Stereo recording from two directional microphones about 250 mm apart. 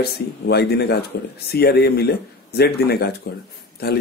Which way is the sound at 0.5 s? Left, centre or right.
Left.